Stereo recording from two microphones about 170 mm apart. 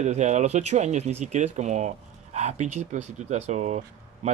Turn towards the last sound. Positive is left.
turn(degrees=-45)  # may be behind; listen again after turning